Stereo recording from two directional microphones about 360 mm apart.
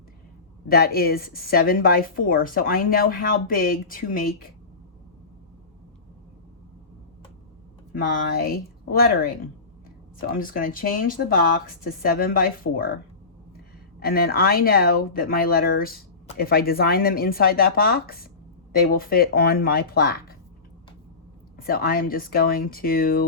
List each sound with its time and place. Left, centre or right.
0.7 s a woman's voice: left
7.9 s a woman's voice: left
14.0 s a woman's voice: left
21.5 s a woman's voice: left